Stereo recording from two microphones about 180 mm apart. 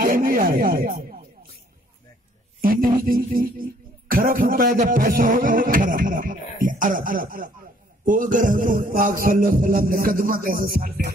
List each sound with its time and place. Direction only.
0.0 s speech: 50° right (ahead or behind)
2.6 s speech: 55° right (ahead or behind)